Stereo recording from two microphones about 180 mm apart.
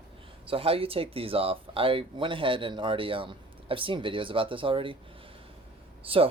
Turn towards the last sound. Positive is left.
turn(degrees=-30)  # may be behind; listen again after turning